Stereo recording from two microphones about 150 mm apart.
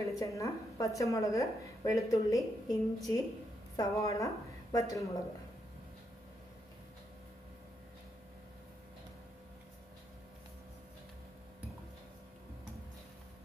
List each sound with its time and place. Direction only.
0.1 s a woman's voice: 20° left (ahead or behind)